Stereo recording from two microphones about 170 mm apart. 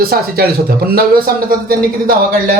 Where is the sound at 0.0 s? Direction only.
60° right (ahead or behind).